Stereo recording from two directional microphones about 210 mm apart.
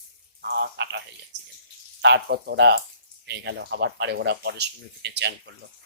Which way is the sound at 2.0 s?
55° right (ahead or behind).